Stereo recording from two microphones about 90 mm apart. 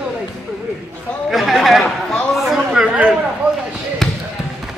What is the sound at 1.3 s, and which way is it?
Chatter, centre (ahead or behind).